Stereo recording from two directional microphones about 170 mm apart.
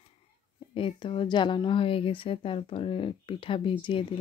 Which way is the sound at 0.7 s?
30° left (ahead or behind).